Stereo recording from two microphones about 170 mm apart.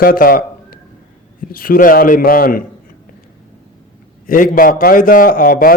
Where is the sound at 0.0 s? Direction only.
60° left (ahead or behind).